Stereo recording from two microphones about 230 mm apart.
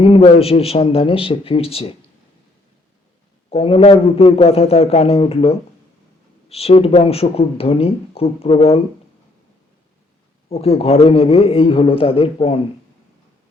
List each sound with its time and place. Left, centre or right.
0.0 s speech: left
3.5 s speech: left
10.5 s speech: left